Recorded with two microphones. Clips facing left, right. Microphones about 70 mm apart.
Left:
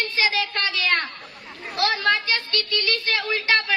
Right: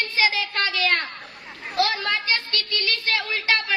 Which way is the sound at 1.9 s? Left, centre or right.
Right.